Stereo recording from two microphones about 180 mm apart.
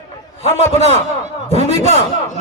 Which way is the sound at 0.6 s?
40° right (ahead or behind).